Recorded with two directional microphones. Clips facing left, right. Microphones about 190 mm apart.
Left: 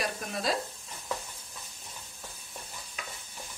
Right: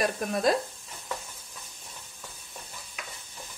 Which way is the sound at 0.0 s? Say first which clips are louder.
Right 7 dB; 50° right (ahead or behind).